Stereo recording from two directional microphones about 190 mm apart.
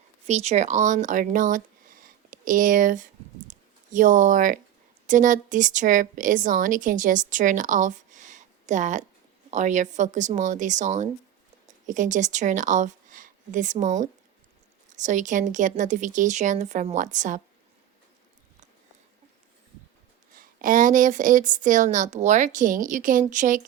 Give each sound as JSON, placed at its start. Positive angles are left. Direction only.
{"t": 0.3, "sound": "a woman's voice", "side_deg": -35}
{"t": 20.3, "sound": "a woman's voice", "side_deg": -45}